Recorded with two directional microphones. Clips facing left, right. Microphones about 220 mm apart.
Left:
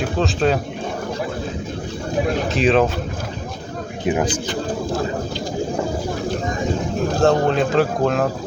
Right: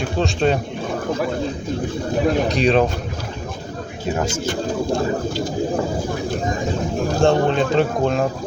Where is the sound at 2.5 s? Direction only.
Centre (ahead or behind).